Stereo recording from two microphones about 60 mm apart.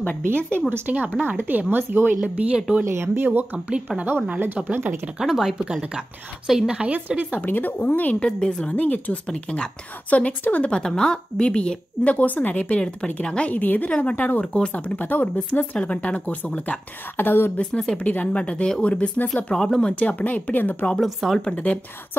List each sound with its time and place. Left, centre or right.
0.5 s speech: right
2.2 s speech: right
2.8 s speech: right
3.5 s speech: centre
4.7 s speech: right
5.2 s a woman's voice: centre
6.9 s speech: right
7.3 s a woman's voice: left
8.3 s a woman's voice: centre; by 17.5 s left
17.6 s a woman's voice: centre
19.3 s speech: centre
19.9 s a woman's voice: left